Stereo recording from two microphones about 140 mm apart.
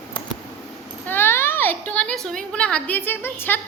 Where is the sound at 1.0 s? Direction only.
15° left (ahead or behind).